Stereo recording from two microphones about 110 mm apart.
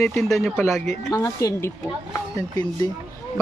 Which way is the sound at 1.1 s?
30° left (ahead or behind).